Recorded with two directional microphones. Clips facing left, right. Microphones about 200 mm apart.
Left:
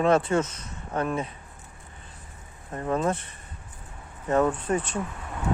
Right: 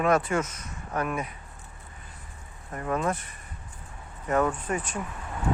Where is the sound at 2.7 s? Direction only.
25° left (ahead or behind).